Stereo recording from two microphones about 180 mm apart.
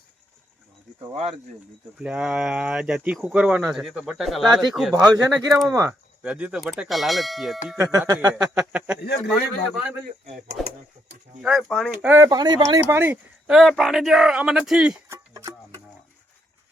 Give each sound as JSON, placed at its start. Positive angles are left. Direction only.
{"t": 2.0, "sound": "speech", "side_deg": -5}
{"t": 5.0, "sound": "speech", "side_deg": -20}
{"t": 6.2, "sound": "speech", "side_deg": -5}
{"t": 7.8, "sound": "speech", "side_deg": -15}
{"t": 8.3, "sound": "speech", "side_deg": -10}
{"t": 11.4, "sound": "speech", "side_deg": 0}
{"t": 12.0, "sound": "speech", "side_deg": -15}
{"t": 15.1, "sound": "music", "side_deg": -15}